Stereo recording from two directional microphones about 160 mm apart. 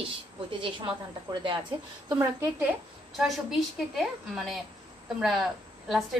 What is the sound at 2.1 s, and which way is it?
Speech, 20° right (ahead or behind).